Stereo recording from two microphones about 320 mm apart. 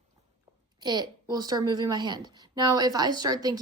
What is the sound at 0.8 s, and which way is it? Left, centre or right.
Speech, centre.